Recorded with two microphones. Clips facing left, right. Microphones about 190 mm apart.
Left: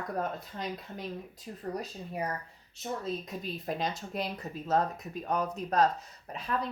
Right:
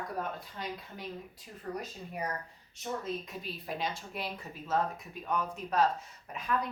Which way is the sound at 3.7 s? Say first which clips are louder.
Left 3 dB; 40° left (ahead or behind).